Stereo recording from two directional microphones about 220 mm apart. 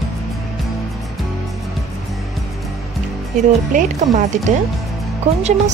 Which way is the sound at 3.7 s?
35° right (ahead or behind).